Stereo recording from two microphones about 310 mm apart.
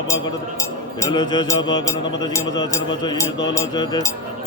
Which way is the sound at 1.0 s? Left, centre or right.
Centre.